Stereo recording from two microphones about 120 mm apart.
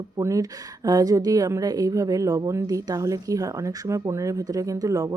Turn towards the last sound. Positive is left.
turn(degrees=-30)  # may be behind; listen again after turning